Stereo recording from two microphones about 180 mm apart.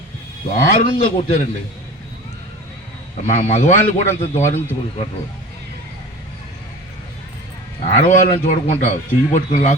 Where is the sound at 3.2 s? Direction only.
45° left (ahead or behind).